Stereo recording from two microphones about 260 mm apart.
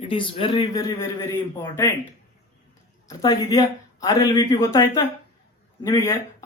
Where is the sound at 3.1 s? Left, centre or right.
Centre.